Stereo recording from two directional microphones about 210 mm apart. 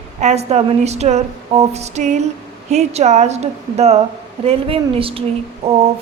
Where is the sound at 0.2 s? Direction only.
30° right (ahead or behind).